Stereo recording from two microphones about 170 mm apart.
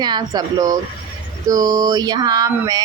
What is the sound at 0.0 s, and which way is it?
Speech, 25° right (ahead or behind).